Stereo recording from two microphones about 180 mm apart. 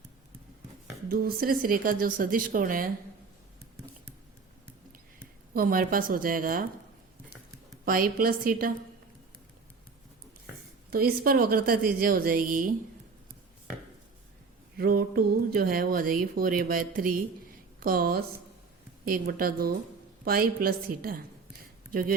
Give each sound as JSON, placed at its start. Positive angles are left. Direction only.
{"t": 1.1, "sound": "speech", "side_deg": -55}
{"t": 5.5, "sound": "speech", "side_deg": -50}
{"t": 7.9, "sound": "speech", "side_deg": -55}
{"t": 10.9, "sound": "speech", "side_deg": -55}
{"t": 14.8, "sound": "a woman's voice", "side_deg": -55}